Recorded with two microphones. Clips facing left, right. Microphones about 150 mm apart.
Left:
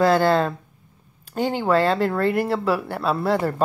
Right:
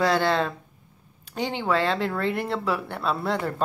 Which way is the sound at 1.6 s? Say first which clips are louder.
Left 5 dB; centre (ahead or behind).